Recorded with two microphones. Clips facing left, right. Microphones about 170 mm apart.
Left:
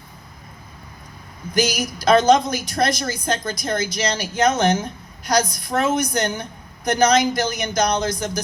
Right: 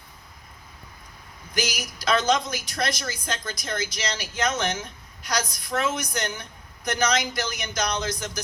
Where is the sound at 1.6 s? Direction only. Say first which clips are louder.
Left 8 dB; 55° left (ahead or behind).